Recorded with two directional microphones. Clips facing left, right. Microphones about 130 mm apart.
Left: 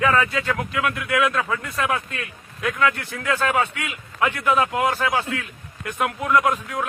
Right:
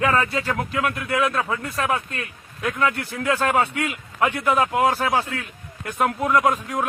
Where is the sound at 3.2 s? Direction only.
35° right (ahead or behind).